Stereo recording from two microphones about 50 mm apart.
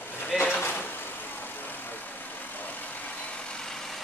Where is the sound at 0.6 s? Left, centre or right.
Left.